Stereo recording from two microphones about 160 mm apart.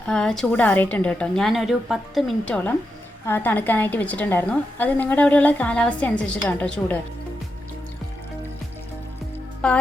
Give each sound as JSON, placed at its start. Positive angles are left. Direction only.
{"t": 0.1, "sound": "a woman's voice", "side_deg": 5}
{"t": 9.6, "sound": "a woman's voice", "side_deg": 5}